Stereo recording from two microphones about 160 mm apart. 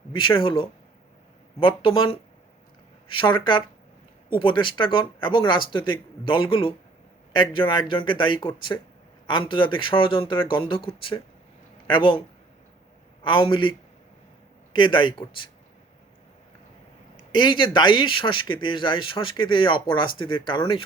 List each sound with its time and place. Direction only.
0.1 s speech: 30° left (ahead or behind)
13.2 s speech: 30° left (ahead or behind)
17.3 s speech: 30° left (ahead or behind)